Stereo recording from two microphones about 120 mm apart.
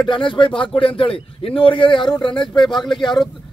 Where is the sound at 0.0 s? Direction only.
45° left (ahead or behind).